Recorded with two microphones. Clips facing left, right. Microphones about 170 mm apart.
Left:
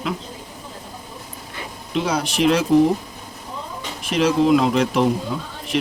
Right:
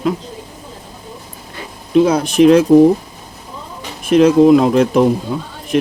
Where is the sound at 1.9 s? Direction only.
50° right (ahead or behind).